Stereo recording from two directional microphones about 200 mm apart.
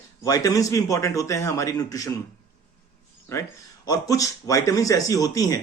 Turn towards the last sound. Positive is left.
turn(degrees=15)  # may be behind; listen again after turning